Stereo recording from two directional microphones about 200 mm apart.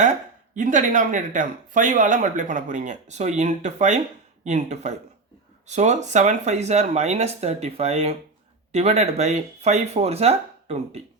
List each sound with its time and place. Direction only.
0.5 s speech: 40° right (ahead or behind)